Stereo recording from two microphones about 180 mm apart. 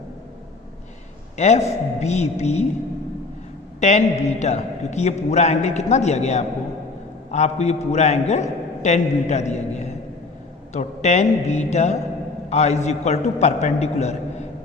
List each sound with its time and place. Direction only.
1.4 s a man's voice: 40° left (ahead or behind)
3.8 s a man's voice: 40° left (ahead or behind)